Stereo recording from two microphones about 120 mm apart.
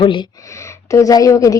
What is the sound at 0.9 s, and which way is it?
Speech, 30° left (ahead or behind).